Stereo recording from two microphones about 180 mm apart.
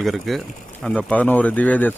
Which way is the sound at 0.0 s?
Centre (ahead or behind).